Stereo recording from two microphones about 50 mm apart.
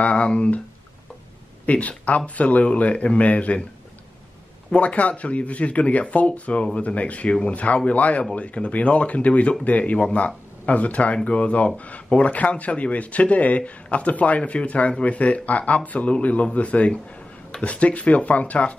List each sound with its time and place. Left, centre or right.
0.0 s speech: left
1.7 s speech: left
4.6 s speech: left